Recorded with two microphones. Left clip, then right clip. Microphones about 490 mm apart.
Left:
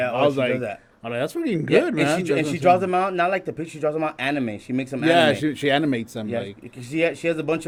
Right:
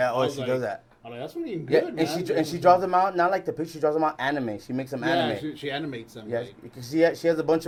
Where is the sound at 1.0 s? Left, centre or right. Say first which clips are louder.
Left 10 dB; left.